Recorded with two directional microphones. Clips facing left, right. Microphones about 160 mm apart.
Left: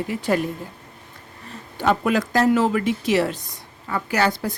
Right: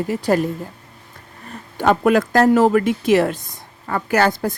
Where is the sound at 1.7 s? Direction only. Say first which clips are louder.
Right 5 dB; 55° right (ahead or behind).